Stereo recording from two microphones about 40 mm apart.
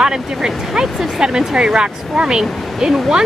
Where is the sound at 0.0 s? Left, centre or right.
Centre.